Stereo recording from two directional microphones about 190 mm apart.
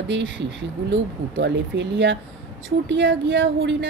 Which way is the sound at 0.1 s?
75° right (ahead or behind).